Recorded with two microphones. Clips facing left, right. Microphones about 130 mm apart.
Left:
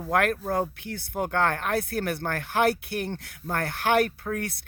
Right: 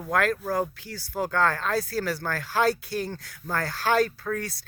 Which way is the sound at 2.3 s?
20° left (ahead or behind).